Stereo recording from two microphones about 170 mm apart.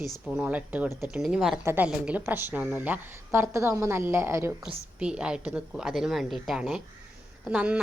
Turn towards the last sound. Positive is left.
turn(degrees=-5)  # may be behind; listen again after turning